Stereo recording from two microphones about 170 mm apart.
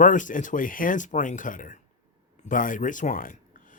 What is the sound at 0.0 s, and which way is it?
Speech, 50° left (ahead or behind).